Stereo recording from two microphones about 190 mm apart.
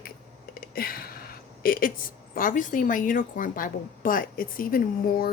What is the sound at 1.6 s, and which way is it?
A woman's voice, 50° left (ahead or behind).